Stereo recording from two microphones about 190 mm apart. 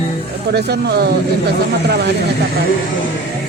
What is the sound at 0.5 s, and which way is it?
Speech, 60° right (ahead or behind).